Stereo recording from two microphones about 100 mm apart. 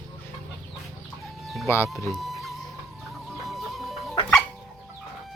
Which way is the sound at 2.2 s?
Centre (ahead or behind).